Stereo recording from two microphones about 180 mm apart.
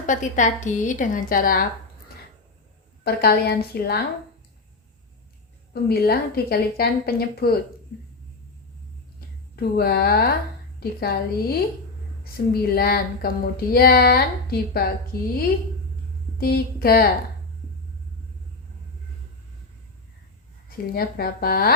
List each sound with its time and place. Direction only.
0.0 s a woman's voice: 45° left (ahead or behind)
3.0 s a woman's voice: 60° left (ahead or behind)
5.7 s a woman's voice: 60° left (ahead or behind)
9.6 s a woman's voice: 60° left (ahead or behind)
16.4 s a woman's voice: 55° left (ahead or behind)
20.7 s a woman's voice: 55° left (ahead or behind)